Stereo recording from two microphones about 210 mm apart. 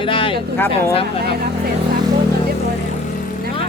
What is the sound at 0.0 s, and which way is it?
Vehicle, 25° left (ahead or behind).